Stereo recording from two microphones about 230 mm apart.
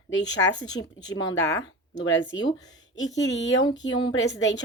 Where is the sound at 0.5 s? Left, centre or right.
Centre.